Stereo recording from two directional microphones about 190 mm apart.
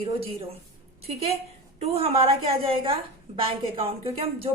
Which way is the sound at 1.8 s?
30° right (ahead or behind).